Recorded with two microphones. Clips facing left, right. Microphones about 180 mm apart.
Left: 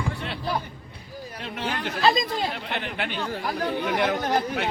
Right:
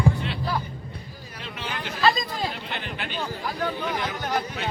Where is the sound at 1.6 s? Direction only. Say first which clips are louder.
Left 1 dB; 50° left (ahead or behind).